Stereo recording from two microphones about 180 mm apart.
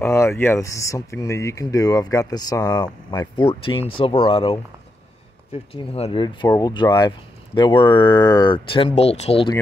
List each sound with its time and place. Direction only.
0.0 s speech: 15° left (ahead or behind); by 9.6 s 30° left (ahead or behind)